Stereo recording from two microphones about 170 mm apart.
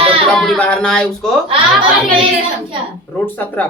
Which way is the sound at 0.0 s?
35° right (ahead or behind).